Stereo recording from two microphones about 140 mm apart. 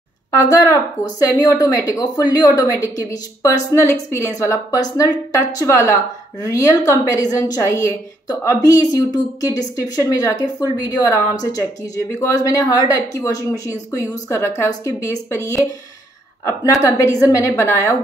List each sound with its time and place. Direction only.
0.3 s a woman's voice: 25° left (ahead or behind)
12.2 s a woman's voice: 20° left (ahead or behind)